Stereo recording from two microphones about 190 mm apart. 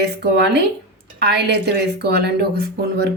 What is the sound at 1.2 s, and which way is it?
A woman's voice, 60° right (ahead or behind).